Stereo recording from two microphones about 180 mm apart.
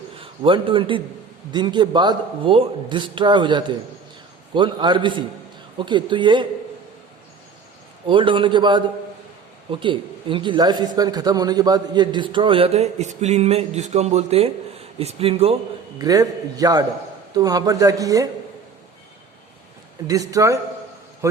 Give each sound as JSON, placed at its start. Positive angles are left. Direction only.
{"t": 0.2, "sound": "a man's voice", "side_deg": -30}
{"t": 8.0, "sound": "a man's voice", "side_deg": -25}
{"t": 16.0, "sound": "a man's voice", "side_deg": -20}
{"t": 20.1, "sound": "a man's voice", "side_deg": -20}